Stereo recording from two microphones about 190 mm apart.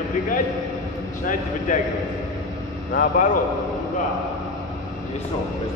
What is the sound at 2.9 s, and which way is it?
Speech, 45° left (ahead or behind).